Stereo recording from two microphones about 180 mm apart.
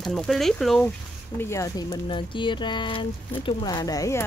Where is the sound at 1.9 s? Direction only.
25° left (ahead or behind).